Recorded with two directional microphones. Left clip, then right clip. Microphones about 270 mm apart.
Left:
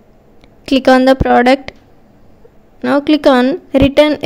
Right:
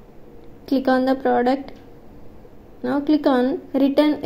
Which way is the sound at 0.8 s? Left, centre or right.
Left.